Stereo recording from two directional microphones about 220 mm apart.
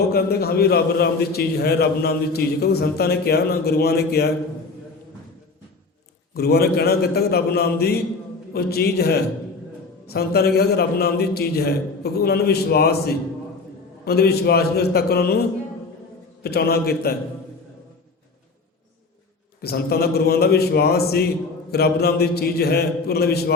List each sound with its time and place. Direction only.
0.1 s a man's voice: 45° left (ahead or behind)
6.3 s a man's voice: 45° left (ahead or behind)
16.4 s a man's voice: 45° left (ahead or behind)
19.6 s a man's voice: 45° left (ahead or behind)